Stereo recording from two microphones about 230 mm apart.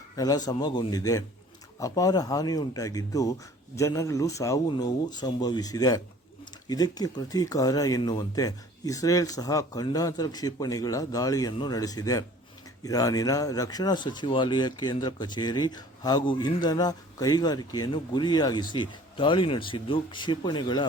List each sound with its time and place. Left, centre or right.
0.2 s speech: centre